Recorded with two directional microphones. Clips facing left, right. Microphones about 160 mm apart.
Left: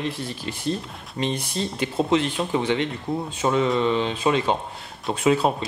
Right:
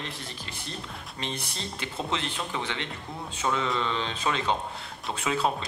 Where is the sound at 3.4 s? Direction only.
30° left (ahead or behind).